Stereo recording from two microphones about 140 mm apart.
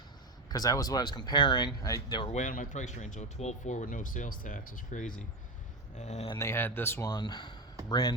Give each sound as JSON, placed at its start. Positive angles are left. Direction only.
{"t": 0.4, "sound": "speech", "side_deg": 25}
{"t": 2.3, "sound": "speech", "side_deg": 70}
{"t": 6.0, "sound": "speech", "side_deg": 55}
{"t": 6.4, "sound": "speech", "side_deg": 15}
{"t": 7.1, "sound": "speech", "side_deg": 30}